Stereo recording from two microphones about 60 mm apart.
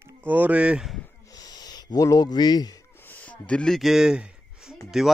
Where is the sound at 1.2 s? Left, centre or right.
Left.